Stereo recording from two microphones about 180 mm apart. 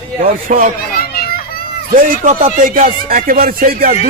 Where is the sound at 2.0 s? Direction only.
45° right (ahead or behind).